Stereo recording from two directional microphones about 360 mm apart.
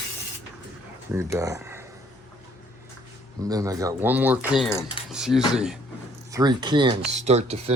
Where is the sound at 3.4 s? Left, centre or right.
Centre.